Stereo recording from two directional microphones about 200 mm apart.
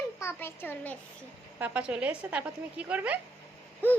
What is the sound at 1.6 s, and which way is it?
A woman's voice, 5° right (ahead or behind).